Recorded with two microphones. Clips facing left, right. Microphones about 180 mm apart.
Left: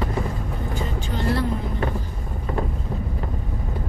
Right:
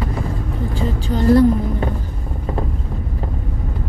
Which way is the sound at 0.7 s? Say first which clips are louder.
Right 8 dB; 40° right (ahead or behind).